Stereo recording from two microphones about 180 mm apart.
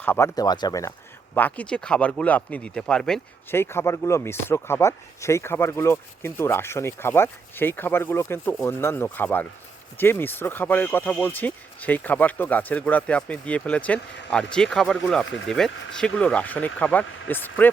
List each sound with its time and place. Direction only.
0.0 s speech: 15° left (ahead or behind)